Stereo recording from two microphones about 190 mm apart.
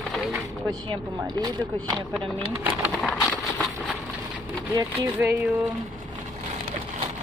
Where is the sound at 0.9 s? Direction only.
20° right (ahead or behind).